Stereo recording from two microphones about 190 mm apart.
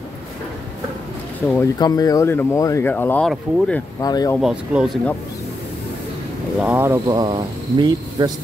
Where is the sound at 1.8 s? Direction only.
20° left (ahead or behind); by 3.8 s centre (ahead or behind).